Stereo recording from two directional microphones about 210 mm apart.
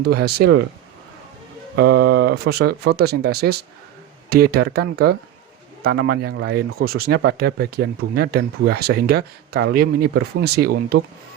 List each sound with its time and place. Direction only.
0.0 s speech: 50° right (ahead or behind)
1.7 s speech: 50° right (ahead or behind)